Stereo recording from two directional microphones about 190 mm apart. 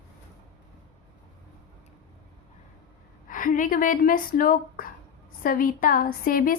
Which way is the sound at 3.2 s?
45° left (ahead or behind).